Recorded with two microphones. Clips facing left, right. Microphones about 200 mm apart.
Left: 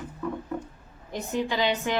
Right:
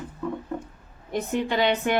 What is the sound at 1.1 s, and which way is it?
Speech, 55° right (ahead or behind).